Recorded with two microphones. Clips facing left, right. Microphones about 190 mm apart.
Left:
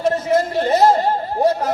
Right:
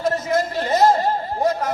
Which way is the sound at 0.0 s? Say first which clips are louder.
Left 3 dB; 30° left (ahead or behind).